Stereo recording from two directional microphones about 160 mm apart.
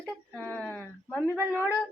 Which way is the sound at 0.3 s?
5° left (ahead or behind).